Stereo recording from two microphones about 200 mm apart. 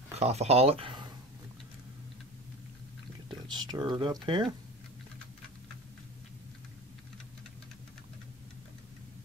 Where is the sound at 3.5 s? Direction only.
20° right (ahead or behind).